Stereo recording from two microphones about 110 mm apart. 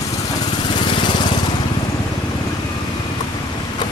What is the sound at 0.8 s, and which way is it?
Lawn mower, 45° left (ahead or behind).